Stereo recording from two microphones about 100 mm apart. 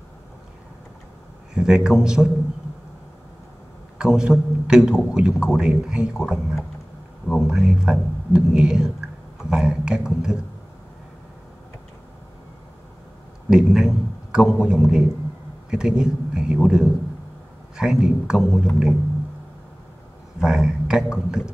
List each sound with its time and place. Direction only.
1.5 s speech: 5° right (ahead or behind)
4.0 s a man's voice: 5° right (ahead or behind)
13.5 s a man's voice: 5° right (ahead or behind)
20.3 s a man's voice: 5° right (ahead or behind)